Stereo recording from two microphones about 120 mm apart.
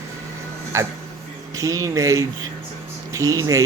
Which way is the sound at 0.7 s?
25° right (ahead or behind).